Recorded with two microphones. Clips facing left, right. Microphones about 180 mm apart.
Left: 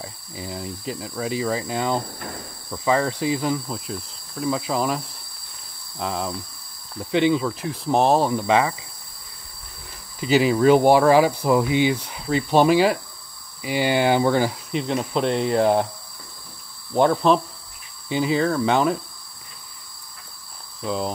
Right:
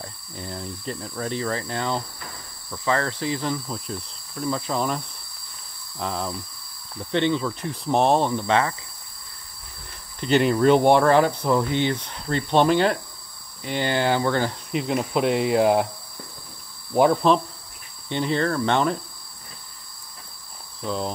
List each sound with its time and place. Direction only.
0.0 s cricket: 5° left (ahead or behind)
5.9 s speech: 5° left (ahead or behind)
8.3 s cricket: 10° left (ahead or behind)
10.2 s speech: 5° left (ahead or behind)
13.6 s cricket: 10° left (ahead or behind)
14.7 s speech: 5° right (ahead or behind)
16.9 s speech: 5° right (ahead or behind)
20.8 s speech: 5° left (ahead or behind)